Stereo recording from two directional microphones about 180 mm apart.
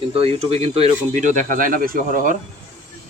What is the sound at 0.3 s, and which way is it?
Speech, 35° right (ahead or behind).